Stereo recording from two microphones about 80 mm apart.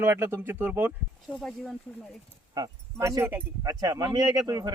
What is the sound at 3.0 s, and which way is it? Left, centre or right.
Speech, right.